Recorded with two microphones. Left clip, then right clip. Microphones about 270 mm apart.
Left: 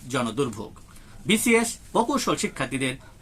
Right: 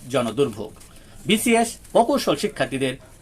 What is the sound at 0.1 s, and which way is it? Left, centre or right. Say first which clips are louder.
Speech: right 5 dB; centre.